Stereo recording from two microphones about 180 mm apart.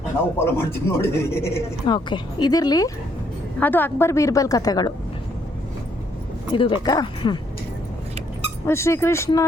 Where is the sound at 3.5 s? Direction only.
10° left (ahead or behind).